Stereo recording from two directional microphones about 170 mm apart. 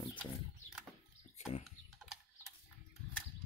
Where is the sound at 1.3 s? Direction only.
40° left (ahead or behind).